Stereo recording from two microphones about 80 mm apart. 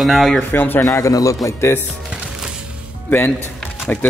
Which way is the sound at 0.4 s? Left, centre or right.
Left.